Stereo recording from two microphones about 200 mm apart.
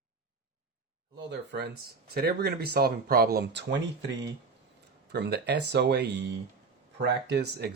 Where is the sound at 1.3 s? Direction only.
60° right (ahead or behind).